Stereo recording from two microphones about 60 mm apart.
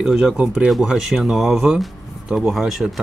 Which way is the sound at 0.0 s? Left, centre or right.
Centre.